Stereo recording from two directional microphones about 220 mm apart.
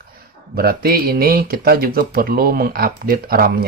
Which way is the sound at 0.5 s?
45° right (ahead or behind).